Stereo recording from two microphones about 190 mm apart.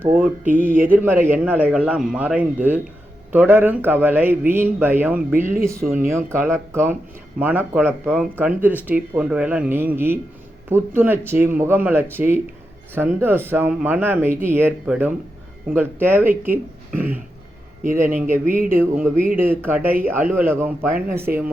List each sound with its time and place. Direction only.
0.0 s speech: 10° right (ahead or behind)
5.8 s speech: 50° right (ahead or behind)
6.1 s speech: 15° right (ahead or behind)
17.8 s speech: 45° right (ahead or behind)
18.7 s speech: 10° right (ahead or behind)